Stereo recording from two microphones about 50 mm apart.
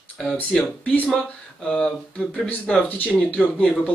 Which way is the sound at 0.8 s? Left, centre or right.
Left.